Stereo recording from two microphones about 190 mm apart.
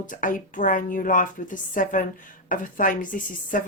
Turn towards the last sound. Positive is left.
turn(degrees=45)  # may be behind; listen again after turning